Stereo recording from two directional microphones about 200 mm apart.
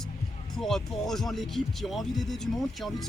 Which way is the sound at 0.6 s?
Centre (ahead or behind).